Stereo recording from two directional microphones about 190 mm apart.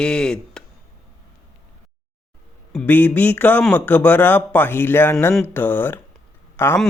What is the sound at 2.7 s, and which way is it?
Speech, 10° left (ahead or behind).